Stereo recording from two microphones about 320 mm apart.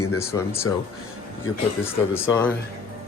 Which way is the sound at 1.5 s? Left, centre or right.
Left.